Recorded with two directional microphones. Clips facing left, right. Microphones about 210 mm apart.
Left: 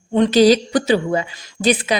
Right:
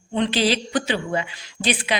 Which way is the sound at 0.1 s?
45° left (ahead or behind).